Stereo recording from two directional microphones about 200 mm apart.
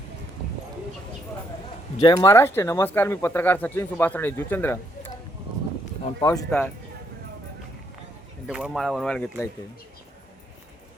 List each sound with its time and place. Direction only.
2.0 s speech: 20° left (ahead or behind)
6.1 s speech: 15° left (ahead or behind)
8.4 s speech: 5° right (ahead or behind)